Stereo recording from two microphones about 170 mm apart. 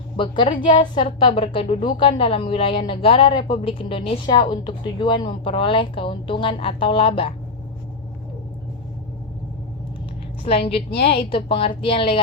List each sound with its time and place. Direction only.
0.2 s a woman's voice: 30° left (ahead or behind)
10.4 s a woman's voice: 35° left (ahead or behind)